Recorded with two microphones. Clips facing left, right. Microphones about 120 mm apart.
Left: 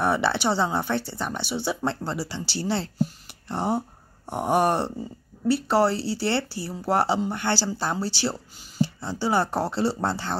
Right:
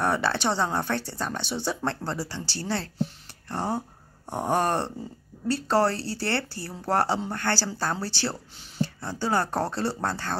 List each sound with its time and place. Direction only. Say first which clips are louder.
0.0 s speech: left 2 dB; 15° left (ahead or behind)
8.5 s a sound: left 4 dB; 5° left (ahead or behind)
9.2 s speech: left 2 dB; 15° left (ahead or behind)